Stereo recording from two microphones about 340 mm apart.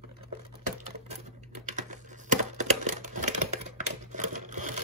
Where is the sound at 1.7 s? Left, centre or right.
Right.